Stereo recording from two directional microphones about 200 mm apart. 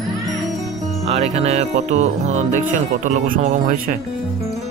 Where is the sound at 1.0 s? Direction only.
30° right (ahead or behind).